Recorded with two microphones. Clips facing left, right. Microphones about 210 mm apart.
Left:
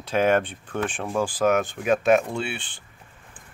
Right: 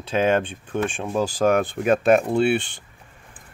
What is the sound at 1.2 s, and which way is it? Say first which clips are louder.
Speech: right 2 dB; 40° right (ahead or behind).